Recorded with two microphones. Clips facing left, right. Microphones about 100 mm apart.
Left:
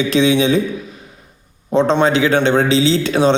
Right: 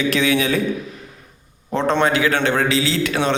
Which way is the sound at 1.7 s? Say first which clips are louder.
Left 4 dB; 20° left (ahead or behind).